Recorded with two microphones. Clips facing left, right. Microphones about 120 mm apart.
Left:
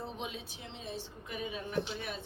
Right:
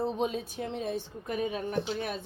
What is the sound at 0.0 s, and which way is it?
Speech, 40° right (ahead or behind).